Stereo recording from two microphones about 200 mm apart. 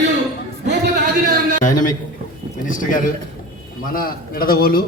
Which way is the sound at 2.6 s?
40° left (ahead or behind).